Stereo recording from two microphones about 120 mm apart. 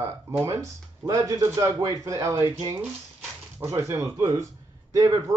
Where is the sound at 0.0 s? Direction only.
20° right (ahead or behind).